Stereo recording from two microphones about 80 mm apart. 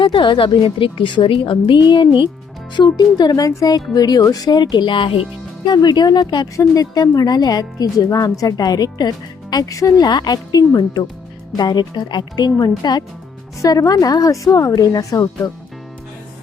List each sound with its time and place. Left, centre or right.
0.0 s a woman's voice: left
2.7 s speech: left
5.6 s speech: left
6.6 s speech: left
10.1 s speech: left
13.6 s speech: left